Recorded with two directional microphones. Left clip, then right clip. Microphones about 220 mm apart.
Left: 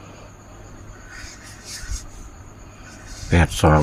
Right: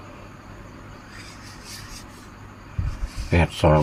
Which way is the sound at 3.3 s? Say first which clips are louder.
Left 2 dB; 30° left (ahead or behind).